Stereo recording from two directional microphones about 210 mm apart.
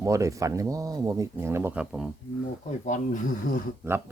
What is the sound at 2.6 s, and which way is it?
Speech, 35° left (ahead or behind).